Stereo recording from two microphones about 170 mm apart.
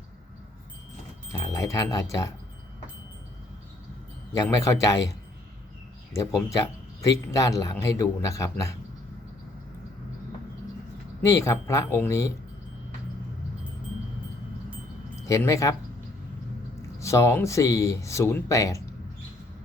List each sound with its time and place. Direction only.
1.3 s speech: 15° left (ahead or behind)
4.4 s a man's voice: 15° left (ahead or behind)
6.1 s a man's voice: 20° left (ahead or behind)
11.3 s speech: 15° left (ahead or behind)
15.3 s a man's voice: 20° left (ahead or behind)
17.0 s speech: 15° left (ahead or behind)